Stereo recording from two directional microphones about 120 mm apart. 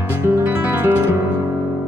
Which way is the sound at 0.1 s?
15° right (ahead or behind).